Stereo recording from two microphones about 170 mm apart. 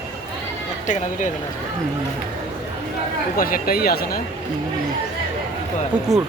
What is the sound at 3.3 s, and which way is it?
Speech, 55° left (ahead or behind).